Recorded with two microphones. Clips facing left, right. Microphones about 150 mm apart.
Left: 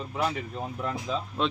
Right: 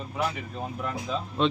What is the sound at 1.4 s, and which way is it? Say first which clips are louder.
Speech: right 4 dB; centre (ahead or behind).